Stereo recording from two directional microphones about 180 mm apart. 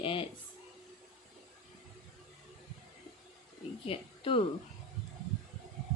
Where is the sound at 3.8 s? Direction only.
30° left (ahead or behind).